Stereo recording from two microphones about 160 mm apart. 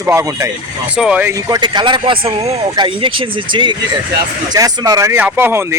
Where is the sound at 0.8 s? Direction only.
5° right (ahead or behind).